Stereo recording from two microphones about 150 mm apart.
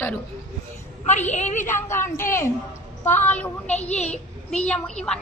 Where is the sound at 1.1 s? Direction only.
50° left (ahead or behind).